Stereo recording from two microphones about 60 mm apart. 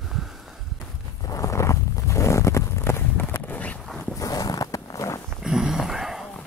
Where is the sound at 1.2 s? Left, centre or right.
Left.